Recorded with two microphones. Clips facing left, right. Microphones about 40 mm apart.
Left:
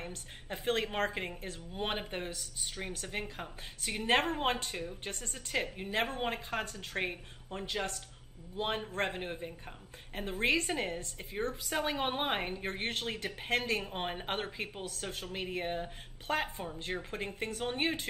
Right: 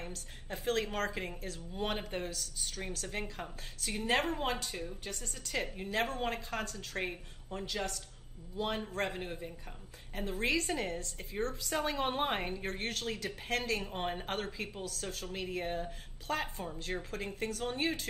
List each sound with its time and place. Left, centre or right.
0.0 s a woman's voice: left